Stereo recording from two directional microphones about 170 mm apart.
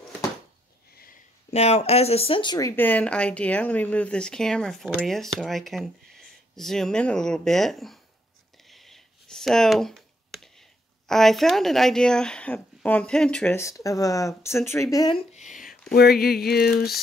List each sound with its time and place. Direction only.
1.5 s speech: 40° left (ahead or behind)
2.7 s speech: 10° left (ahead or behind)
8.6 s clicking: centre (ahead or behind)
13.6 s speech: 20° left (ahead or behind)
15.3 s a sound: 45° left (ahead or behind)
15.9 s a sound: 65° left (ahead or behind)